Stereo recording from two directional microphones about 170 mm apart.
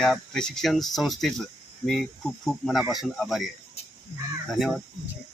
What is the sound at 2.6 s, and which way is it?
Speech, centre (ahead or behind).